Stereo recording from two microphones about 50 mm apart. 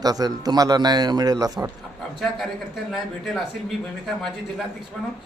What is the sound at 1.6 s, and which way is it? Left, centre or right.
Speech, right.